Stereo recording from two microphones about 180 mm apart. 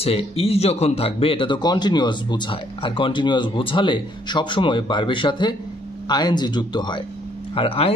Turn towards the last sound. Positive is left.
turn(degrees=35)  # may be behind; listen again after turning